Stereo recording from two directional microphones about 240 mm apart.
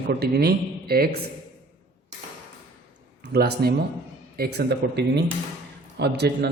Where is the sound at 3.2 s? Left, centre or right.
Right.